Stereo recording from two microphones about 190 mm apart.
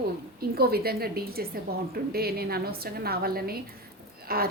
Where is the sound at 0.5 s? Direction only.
55° right (ahead or behind).